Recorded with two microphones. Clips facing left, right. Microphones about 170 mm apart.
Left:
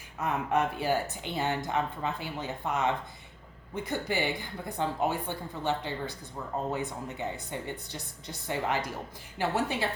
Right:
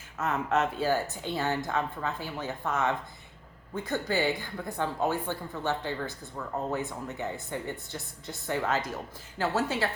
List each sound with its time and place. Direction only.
0.2 s speech: 15° left (ahead or behind)
8.4 s speech: 15° left (ahead or behind)